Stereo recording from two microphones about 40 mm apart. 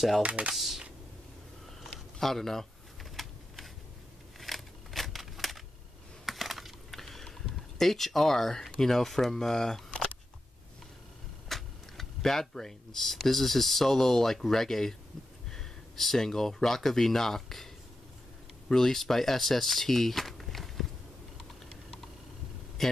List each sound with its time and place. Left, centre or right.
0.2 s speech: right
0.6 s speech: centre
2.1 s a sound: centre
4.4 s scissors: centre
6.2 s computer keyboard: centre
7.4 s speech: centre
11.4 s speech: centre
18.7 s speech: centre